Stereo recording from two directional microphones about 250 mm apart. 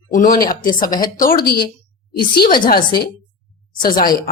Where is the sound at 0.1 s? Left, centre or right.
Left.